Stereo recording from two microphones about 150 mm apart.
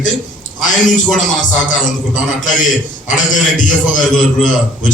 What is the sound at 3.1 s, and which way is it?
A man's voice, 60° left (ahead or behind).